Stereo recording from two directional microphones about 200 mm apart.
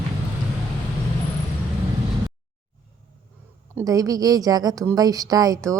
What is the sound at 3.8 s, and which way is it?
A woman's voice, 15° right (ahead or behind).